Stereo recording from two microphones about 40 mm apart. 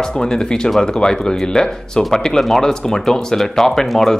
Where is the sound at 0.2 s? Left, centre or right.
Centre.